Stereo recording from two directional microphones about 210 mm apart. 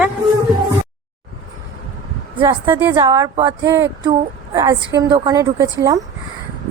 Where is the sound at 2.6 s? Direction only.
10° right (ahead or behind).